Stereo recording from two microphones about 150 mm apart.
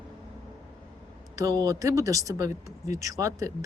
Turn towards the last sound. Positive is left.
turn(degrees=-20)  # may be behind; listen again after turning